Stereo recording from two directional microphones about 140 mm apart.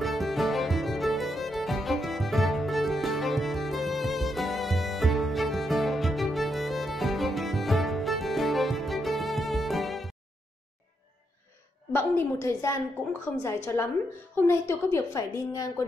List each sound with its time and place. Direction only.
0.0 s music: centre (ahead or behind)
11.9 s a woman's voice: 15° left (ahead or behind)